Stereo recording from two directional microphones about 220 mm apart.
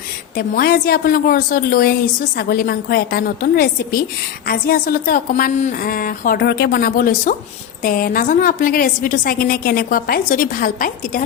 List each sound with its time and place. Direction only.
0.3 s a woman's voice: 40° left (ahead or behind)